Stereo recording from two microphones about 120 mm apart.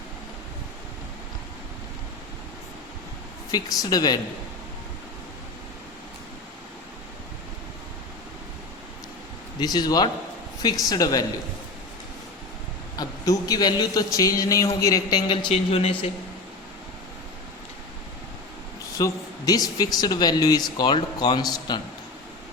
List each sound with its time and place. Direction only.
3.5 s speech: 30° left (ahead or behind)
9.6 s speech: 35° left (ahead or behind)
13.0 s a man's voice: 30° left (ahead or behind)
15.3 s speech: 45° left (ahead or behind)
18.9 s speech: 30° left (ahead or behind)